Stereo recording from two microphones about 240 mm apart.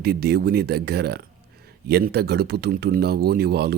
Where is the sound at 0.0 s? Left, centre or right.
Right.